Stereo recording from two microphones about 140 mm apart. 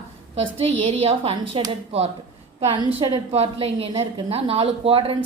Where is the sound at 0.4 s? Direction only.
45° right (ahead or behind).